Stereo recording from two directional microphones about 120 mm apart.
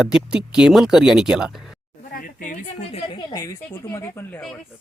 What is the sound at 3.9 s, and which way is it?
Speech, 25° left (ahead or behind).